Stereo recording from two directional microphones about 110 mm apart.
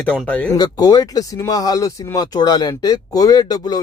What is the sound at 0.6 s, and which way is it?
Speech, 35° left (ahead or behind).